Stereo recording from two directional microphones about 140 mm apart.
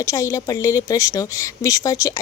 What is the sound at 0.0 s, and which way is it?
Speech, 20° left (ahead or behind).